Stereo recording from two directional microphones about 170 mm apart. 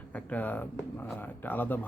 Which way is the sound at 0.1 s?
10° left (ahead or behind).